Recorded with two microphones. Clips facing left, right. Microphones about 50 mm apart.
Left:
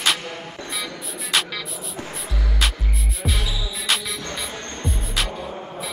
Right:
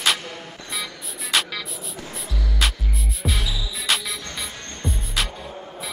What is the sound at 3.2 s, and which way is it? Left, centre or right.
Music, centre.